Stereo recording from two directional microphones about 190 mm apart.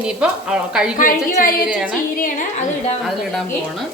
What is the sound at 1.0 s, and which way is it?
A woman's voice, 45° left (ahead or behind).